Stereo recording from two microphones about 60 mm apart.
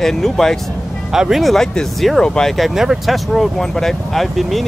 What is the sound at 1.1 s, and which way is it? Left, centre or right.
Speech, centre.